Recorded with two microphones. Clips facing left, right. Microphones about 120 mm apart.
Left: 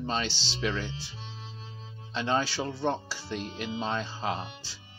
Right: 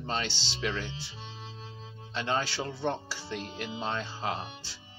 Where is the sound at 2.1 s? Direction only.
20° left (ahead or behind).